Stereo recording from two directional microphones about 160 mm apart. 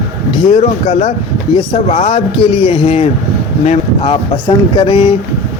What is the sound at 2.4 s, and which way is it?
Speech, 35° left (ahead or behind).